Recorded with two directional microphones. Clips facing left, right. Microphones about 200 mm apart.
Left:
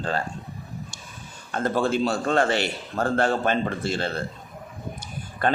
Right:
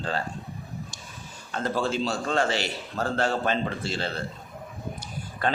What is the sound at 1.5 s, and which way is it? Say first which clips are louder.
A man's voice: left 4 dB; 50° left (ahead or behind).